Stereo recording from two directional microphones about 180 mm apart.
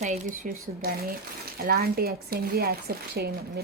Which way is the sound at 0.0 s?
40° right (ahead or behind).